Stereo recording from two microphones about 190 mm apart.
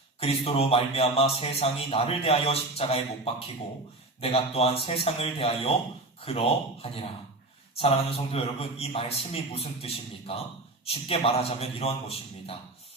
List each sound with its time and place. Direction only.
0.2 s a man's voice: 30° left (ahead or behind)